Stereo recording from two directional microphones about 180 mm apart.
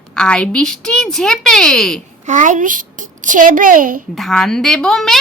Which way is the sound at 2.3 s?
45° right (ahead or behind).